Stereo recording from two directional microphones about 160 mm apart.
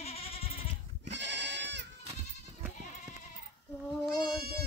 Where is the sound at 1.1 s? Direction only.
90° right.